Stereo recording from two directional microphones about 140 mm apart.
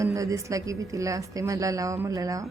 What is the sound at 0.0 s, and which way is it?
A woman's voice, 25° right (ahead or behind).